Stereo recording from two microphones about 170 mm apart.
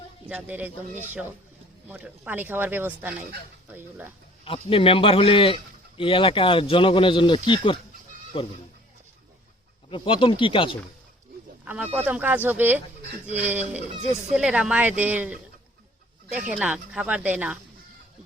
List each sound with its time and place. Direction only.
0.3 s speech: 10° right (ahead or behind)
4.4 s speech: 35° left (ahead or behind)
9.9 s speech: 30° left (ahead or behind)
11.6 s speech: 10° right (ahead or behind)
16.5 s speech: 5° right (ahead or behind)